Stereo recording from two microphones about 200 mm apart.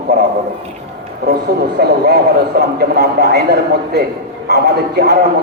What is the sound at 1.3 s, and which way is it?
A man's voice, 55° right (ahead or behind).